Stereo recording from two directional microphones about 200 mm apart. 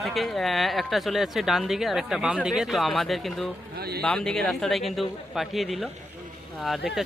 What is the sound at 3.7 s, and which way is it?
Speech, 50° right (ahead or behind).